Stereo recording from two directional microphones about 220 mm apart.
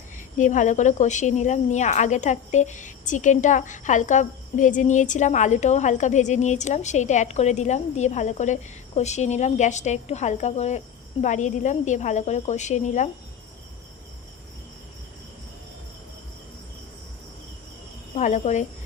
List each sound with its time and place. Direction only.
0.3 s speech: 35° left (ahead or behind)
18.1 s speech: 35° left (ahead or behind)